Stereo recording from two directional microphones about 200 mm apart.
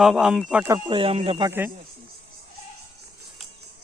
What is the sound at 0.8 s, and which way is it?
Speech, 25° right (ahead or behind).